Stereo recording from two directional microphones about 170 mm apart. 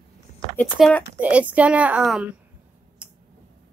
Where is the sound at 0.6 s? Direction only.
5° left (ahead or behind).